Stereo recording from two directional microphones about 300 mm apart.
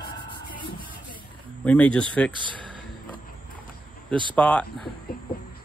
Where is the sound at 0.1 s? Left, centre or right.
Centre.